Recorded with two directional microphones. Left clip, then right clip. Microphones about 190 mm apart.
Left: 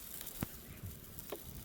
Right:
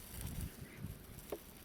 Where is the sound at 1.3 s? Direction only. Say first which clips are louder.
Right 1 dB; 30° left (ahead or behind).